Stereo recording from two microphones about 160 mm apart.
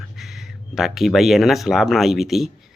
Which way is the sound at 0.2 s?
Centre (ahead or behind).